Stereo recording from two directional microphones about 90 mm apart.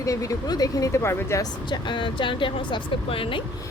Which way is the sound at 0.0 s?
40° left (ahead or behind).